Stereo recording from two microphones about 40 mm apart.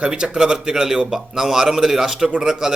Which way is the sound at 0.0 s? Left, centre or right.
Right.